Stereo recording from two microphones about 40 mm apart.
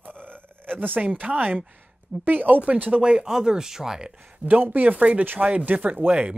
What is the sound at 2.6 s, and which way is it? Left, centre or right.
Speech, right.